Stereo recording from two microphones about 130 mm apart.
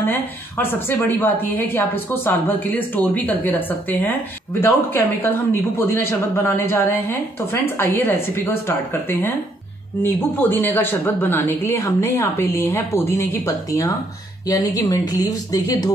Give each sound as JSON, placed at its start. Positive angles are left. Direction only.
{"t": 0.0, "sound": "a woman's voice", "side_deg": 15}